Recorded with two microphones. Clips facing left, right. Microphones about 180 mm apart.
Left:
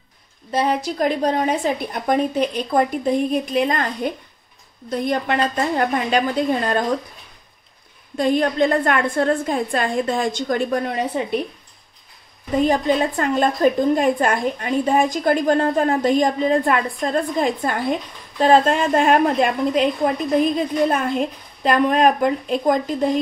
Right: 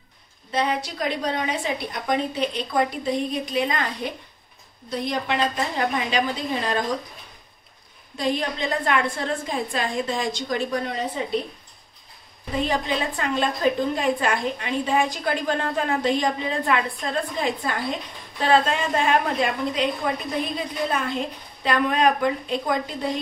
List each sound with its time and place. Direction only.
0.5 s a woman's voice: 45° left (ahead or behind)
8.2 s a woman's voice: 50° left (ahead or behind)
12.5 s a woman's voice: 45° left (ahead or behind)